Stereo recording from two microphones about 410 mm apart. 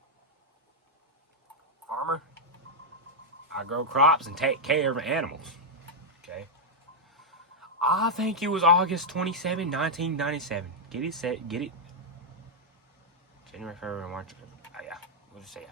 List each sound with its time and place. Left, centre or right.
1.9 s a sound: right
3.9 s speech: centre
7.2 s speech: centre
13.5 s vehicle: centre